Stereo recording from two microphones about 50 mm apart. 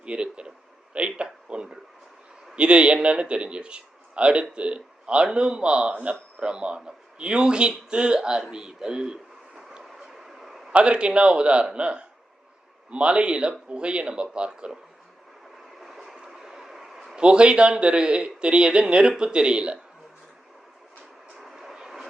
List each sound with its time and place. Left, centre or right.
0.0 s speech: right
9.8 s a sound: centre
10.7 s speech: right
15.8 s a sound: centre
17.2 s speech: right
21.3 s vehicle: centre